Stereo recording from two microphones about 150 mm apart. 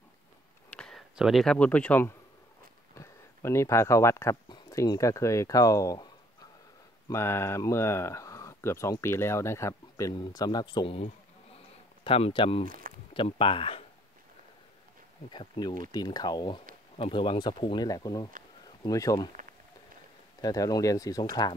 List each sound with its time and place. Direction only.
0.7 s speech: 5° left (ahead or behind); by 6.0 s 20° left (ahead or behind)
7.1 s speech: 15° left (ahead or behind); by 12.6 s 35° left (ahead or behind)
12.6 s speech: 70° right (ahead or behind)
13.1 s speech: 35° left (ahead or behind)
15.2 s speech: 30° left (ahead or behind)
20.3 s speech: 25° left (ahead or behind)